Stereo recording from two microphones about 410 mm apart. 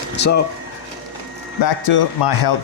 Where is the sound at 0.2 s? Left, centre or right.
Left.